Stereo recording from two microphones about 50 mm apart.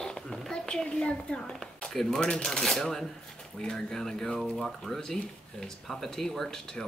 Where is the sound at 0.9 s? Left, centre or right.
Centre.